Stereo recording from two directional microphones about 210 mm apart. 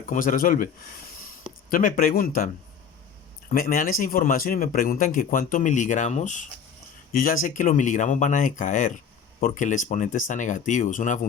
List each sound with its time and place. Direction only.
0.0 s speech: 40° left (ahead or behind)
1.7 s speech: 40° left (ahead or behind)
3.5 s speech: 40° left (ahead or behind)